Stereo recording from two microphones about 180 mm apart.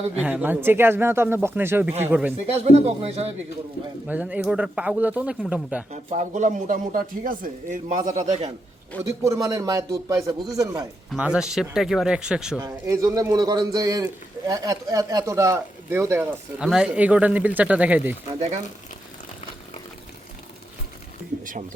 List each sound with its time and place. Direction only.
0.2 s speech: 10° right (ahead or behind)
2.6 s speech: 35° right (ahead or behind)
4.0 s speech: 5° right (ahead or behind)
5.9 s speech: 40° right (ahead or behind)
9.0 s a man's voice: 15° right (ahead or behind)
11.1 s speech: 5° right (ahead or behind)
12.5 s a man's voice: 20° right (ahead or behind)